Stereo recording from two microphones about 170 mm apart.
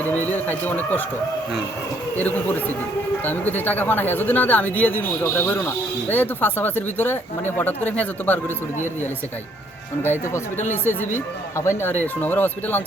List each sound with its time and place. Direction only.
0.3 s speech: 10° left (ahead or behind)
2.1 s speech: 10° left (ahead or behind)
10.0 s speech: 10° left (ahead or behind)